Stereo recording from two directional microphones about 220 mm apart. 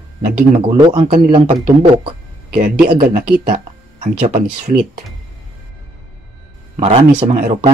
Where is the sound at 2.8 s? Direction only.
40° right (ahead or behind).